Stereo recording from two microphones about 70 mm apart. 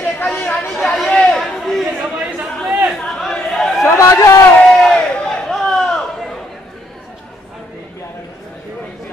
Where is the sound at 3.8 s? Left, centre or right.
Left.